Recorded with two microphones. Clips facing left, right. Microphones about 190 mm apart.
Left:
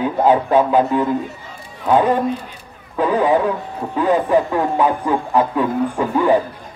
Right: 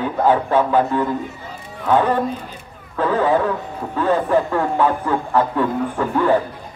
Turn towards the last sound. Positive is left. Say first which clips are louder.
# left 2 dB
turn(degrees=15)  # may be behind; listen again after turning